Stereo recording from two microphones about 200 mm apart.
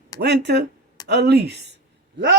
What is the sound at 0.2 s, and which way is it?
A woman's voice, 55° right (ahead or behind).